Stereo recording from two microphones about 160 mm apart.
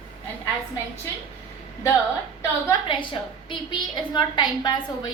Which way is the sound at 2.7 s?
30° left (ahead or behind).